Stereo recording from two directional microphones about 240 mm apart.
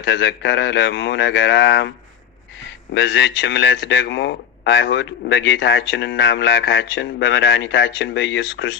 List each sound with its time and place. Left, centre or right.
0.1 s speech: left
2.9 s speech: left